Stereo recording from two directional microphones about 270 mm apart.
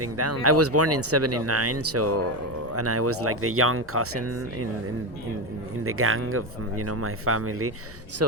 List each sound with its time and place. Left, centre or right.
0.0 s speech: right
5.8 s speech: right